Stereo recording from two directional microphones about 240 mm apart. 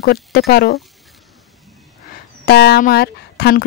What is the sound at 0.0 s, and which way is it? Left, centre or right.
Speech, left.